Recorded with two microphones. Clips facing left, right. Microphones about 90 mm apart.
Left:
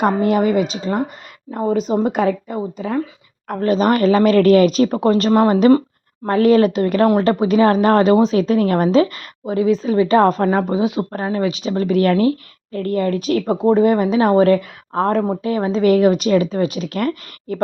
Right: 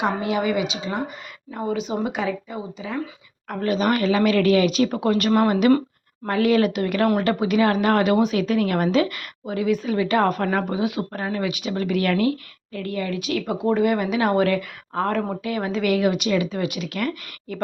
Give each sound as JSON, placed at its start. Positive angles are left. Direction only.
{"t": 0.0, "sound": "a woman's voice", "side_deg": 45}
{"t": 3.5, "sound": "a woman's voice", "side_deg": 35}